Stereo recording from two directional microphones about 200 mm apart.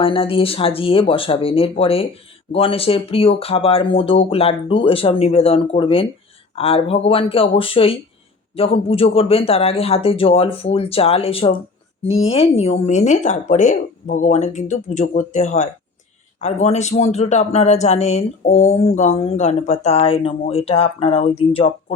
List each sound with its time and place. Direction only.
0.0 s speech: 25° left (ahead or behind)